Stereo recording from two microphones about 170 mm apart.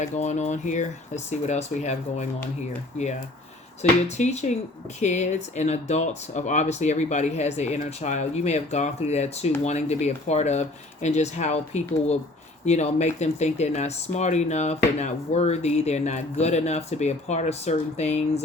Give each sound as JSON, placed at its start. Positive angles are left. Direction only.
{"t": 0.0, "sound": "speech", "side_deg": 45}
{"t": 3.8, "sound": "speech", "side_deg": 40}